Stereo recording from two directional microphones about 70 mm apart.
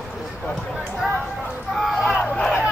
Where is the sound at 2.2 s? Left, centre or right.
Centre.